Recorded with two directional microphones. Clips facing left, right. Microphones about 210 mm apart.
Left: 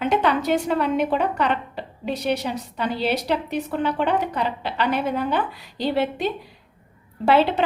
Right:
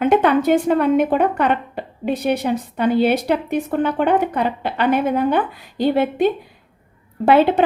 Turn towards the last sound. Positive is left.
turn(degrees=-50)  # may be behind; listen again after turning